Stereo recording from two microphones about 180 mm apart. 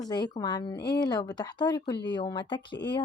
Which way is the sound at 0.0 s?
20° left (ahead or behind).